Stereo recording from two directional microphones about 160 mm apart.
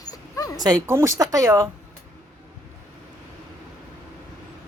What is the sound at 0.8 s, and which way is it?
Speech, 15° right (ahead or behind).